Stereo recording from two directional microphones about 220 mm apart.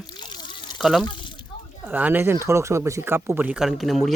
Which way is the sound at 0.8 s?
Centre (ahead or behind).